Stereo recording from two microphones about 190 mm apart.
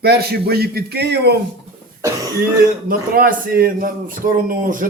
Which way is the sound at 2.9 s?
50° right (ahead or behind).